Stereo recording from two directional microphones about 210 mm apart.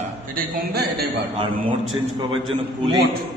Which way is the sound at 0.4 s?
45° right (ahead or behind).